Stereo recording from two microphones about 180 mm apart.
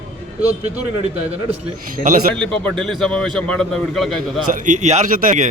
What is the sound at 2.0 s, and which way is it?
Speech, 50° right (ahead or behind).